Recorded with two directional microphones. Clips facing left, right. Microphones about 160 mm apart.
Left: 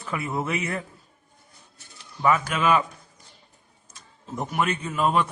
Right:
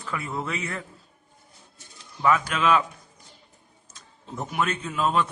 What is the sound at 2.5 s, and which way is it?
Speech, 5° left (ahead or behind).